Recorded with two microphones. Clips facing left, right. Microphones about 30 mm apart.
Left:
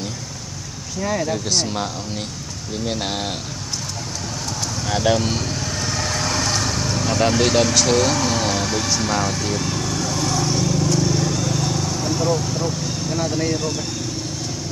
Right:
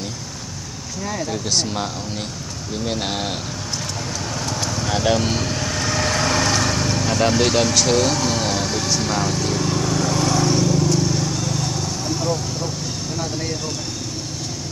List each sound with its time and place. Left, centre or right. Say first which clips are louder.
1.3 s speech: left 1 dB; centre
4.8 s speech: left 1 dB; centre
5.5 s vehicle: right 2 dB; right
6.7 s vehicle: right 2 dB; right
7.0 s speech: left 1 dB; centre
10.0 s vehicle: right 3 dB; right
10.5 s vehicle: right 2 dB; centre
13.2 s speech: left 5 dB; centre